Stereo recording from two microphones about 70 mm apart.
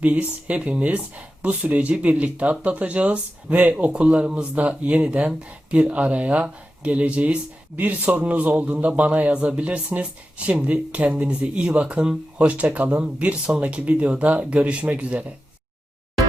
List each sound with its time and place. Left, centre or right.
0.0 s speech: right